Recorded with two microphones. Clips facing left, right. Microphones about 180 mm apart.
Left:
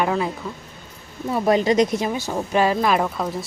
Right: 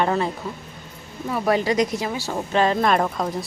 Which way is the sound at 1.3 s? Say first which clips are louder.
Left 3 dB; 25° left (ahead or behind).